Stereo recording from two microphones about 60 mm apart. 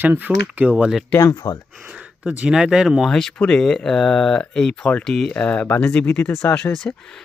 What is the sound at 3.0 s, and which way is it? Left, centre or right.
Speech, centre.